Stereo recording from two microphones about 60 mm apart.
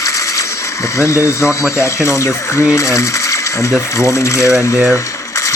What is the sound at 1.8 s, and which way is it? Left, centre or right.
Ratchet, left.